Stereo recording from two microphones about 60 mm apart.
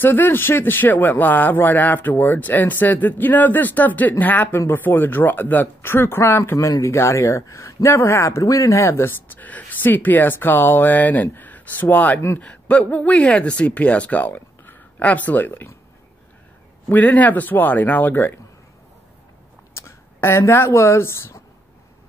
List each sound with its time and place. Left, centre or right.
0.0 s speech: left
6.6 s speech: left
9.3 s speech: left
16.9 s speech: left
19.7 s speech: left